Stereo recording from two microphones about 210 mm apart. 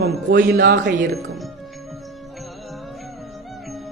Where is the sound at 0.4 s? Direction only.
40° right (ahead or behind).